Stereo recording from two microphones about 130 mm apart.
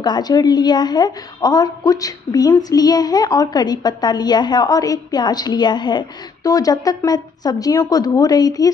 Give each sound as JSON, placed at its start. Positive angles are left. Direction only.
{"t": 0.0, "sound": "a woman's voice", "side_deg": 35}